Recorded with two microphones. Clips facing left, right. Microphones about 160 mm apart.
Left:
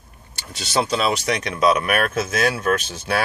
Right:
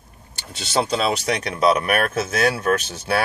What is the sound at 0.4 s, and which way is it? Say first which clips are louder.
Speech: even; 25° right (ahead or behind).